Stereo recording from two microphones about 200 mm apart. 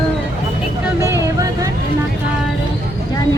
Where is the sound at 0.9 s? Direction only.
15° right (ahead or behind).